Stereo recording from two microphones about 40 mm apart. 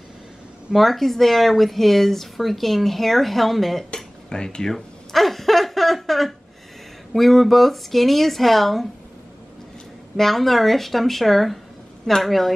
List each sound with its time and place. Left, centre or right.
0.7 s speech: centre
3.9 s speech: left
4.7 s a sound: centre
7.1 s speech: centre
10.1 s speech: centre